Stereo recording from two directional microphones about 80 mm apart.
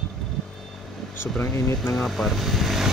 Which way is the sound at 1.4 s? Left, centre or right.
Left.